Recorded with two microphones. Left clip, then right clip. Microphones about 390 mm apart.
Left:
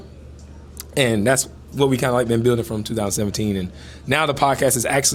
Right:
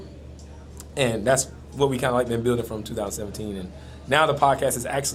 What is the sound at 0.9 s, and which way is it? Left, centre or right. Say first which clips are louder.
A man's voice: left 3 dB; left.